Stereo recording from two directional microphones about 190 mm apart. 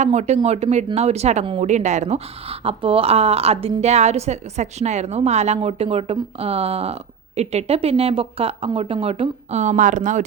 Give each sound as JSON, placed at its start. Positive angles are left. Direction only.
{"t": 0.0, "sound": "a woman's voice", "side_deg": -35}